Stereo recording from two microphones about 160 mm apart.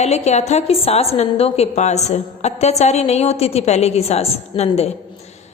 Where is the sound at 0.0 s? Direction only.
45° left (ahead or behind).